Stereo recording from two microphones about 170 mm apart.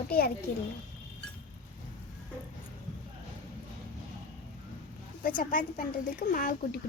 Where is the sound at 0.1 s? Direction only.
60° left (ahead or behind).